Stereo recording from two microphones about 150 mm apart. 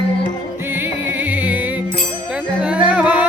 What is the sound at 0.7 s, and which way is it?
Music, 15° right (ahead or behind).